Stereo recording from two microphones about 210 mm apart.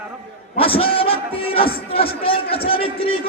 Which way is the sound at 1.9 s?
25° left (ahead or behind).